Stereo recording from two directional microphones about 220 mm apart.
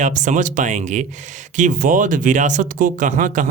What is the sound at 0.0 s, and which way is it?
Speech, 35° right (ahead or behind).